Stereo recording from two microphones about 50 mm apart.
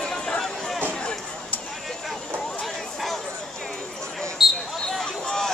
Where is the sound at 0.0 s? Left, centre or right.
Centre.